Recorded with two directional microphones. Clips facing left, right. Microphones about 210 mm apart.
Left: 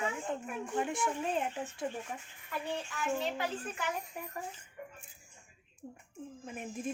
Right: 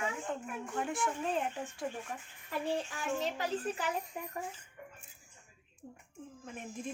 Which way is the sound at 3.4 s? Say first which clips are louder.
Right 2 dB; 35° right (ahead or behind).